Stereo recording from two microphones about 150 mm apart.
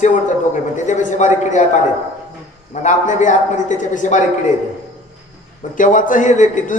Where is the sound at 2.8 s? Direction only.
55° left (ahead or behind).